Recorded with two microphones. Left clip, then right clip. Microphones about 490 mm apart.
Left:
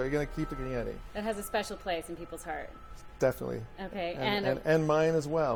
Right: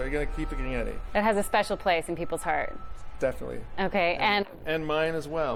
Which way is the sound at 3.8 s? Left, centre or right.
Right.